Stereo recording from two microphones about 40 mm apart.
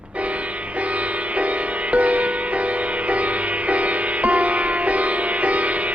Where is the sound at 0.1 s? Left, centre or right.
Right.